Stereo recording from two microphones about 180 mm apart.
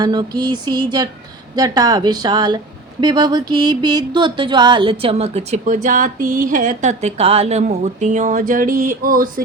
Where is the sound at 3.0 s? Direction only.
25° right (ahead or behind).